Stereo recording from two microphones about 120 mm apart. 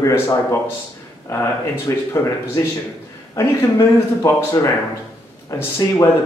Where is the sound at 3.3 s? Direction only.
25° left (ahead or behind).